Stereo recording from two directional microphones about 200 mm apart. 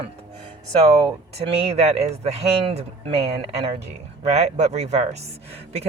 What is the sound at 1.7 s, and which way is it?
Speech, 30° right (ahead or behind).